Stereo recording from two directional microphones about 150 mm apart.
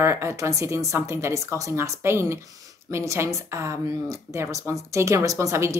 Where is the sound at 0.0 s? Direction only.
20° right (ahead or behind).